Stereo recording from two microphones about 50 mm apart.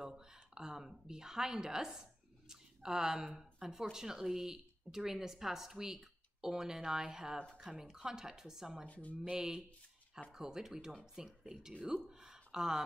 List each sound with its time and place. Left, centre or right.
0.0 s a woman's voice: centre
8.8 s speech: left
9.1 s speech: centre